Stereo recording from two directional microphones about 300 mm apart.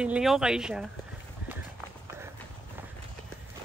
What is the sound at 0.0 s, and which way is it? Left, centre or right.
Speech, centre.